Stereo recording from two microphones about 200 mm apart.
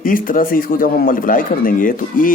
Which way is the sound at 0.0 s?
45° left (ahead or behind).